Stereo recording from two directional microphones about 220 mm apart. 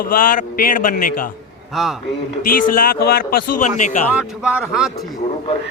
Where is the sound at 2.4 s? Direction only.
40° left (ahead or behind).